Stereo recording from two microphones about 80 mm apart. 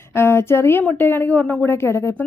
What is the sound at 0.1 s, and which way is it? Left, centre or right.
A woman's voice, left.